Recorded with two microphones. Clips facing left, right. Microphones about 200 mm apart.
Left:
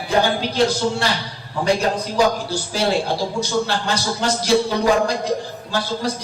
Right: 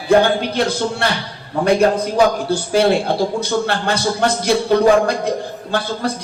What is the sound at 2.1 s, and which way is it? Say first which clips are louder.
A man's voice: right 4 dB; 55° right (ahead or behind).